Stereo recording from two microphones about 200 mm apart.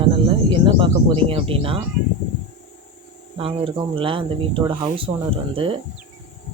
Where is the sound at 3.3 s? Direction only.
25° right (ahead or behind).